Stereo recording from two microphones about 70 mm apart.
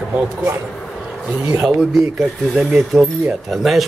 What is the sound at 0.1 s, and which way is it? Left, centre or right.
Speech, centre.